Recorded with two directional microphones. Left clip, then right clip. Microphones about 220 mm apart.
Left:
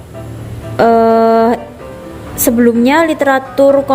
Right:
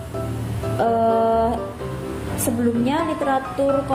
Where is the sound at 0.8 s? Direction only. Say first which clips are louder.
Left 10 dB; 45° left (ahead or behind).